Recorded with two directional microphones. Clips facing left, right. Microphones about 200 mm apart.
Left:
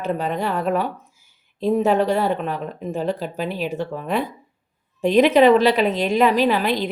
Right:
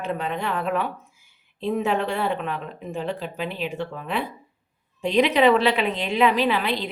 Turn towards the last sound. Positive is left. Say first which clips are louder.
# left 4 dB
turn(degrees=45)  # may be behind; listen again after turning